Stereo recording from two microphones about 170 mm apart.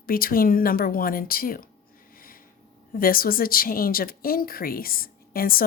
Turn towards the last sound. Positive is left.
turn(degrees=60)  # may be behind; listen again after turning